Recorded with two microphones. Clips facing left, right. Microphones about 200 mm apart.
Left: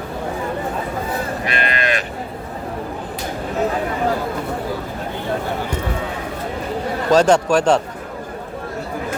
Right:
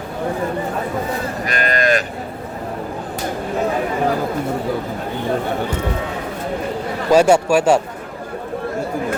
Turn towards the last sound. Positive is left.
turn(degrees=-10)  # may be behind; listen again after turning